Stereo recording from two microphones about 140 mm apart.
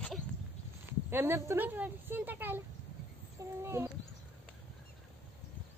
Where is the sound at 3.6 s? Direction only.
20° right (ahead or behind).